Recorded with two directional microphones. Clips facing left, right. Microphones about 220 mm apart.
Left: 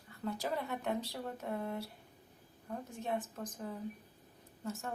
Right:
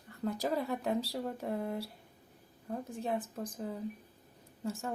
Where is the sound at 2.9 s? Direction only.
30° right (ahead or behind).